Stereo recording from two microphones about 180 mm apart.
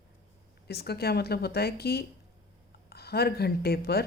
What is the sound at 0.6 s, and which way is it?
A woman's voice, 65° left (ahead or behind).